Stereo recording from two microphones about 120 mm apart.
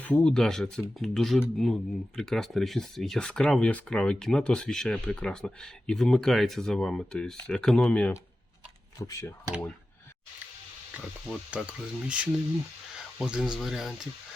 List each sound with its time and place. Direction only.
0.0 s speech: 10° left (ahead or behind)
9.0 s speech: 25° left (ahead or behind)
11.5 s speech: 10° right (ahead or behind)